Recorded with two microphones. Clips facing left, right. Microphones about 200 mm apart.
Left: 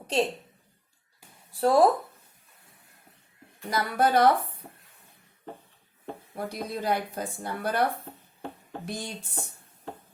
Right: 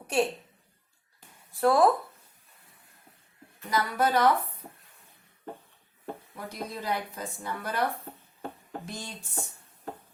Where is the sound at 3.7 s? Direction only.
50° left (ahead or behind).